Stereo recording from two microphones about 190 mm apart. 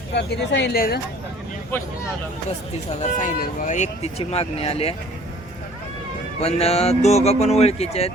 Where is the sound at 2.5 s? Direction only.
35° left (ahead or behind).